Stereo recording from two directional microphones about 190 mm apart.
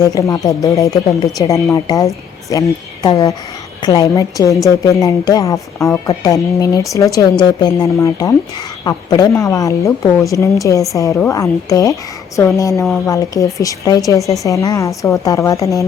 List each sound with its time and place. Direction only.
0.0 s a woman's voice: 15° left (ahead or behind)